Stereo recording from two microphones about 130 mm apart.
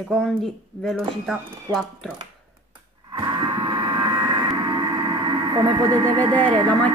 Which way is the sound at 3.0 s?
35° right (ahead or behind).